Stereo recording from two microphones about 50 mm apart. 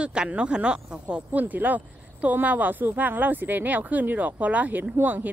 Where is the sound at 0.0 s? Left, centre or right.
Centre.